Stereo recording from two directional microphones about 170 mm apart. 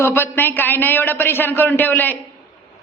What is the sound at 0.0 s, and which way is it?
A man's voice, 10° left (ahead or behind).